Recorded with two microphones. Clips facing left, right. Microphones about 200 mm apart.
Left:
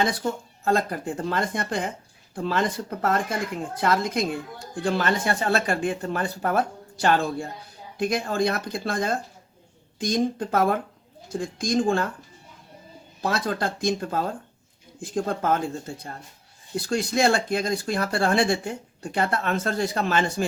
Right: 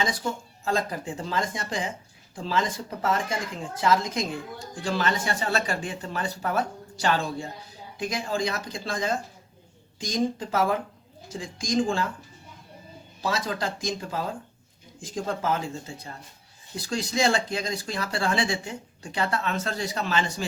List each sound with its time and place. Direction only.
0.6 s speech: 60° left (ahead or behind)
13.2 s speech: 55° left (ahead or behind)
16.7 s speech: 55° left (ahead or behind)